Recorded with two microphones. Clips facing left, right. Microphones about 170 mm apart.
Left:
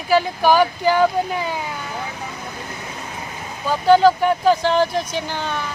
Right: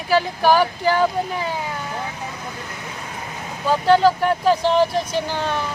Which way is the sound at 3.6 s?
Centre (ahead or behind).